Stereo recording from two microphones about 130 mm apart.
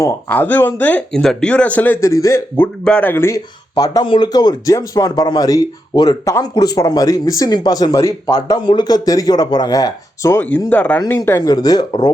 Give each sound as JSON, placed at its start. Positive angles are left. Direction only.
{"t": 0.3, "sound": "speech", "side_deg": 15}
{"t": 2.8, "sound": "speech", "side_deg": 10}
{"t": 10.7, "sound": "speech", "side_deg": 10}
{"t": 11.3, "sound": "speech", "side_deg": 25}